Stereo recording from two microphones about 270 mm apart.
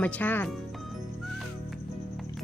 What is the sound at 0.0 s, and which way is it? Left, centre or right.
Speech, centre.